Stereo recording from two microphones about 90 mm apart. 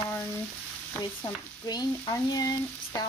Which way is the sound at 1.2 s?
45° left (ahead or behind).